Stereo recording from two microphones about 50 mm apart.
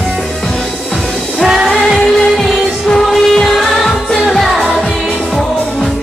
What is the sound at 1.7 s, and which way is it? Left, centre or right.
Music of asia, centre.